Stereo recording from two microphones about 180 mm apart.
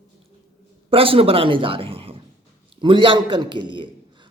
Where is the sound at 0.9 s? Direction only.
30° right (ahead or behind).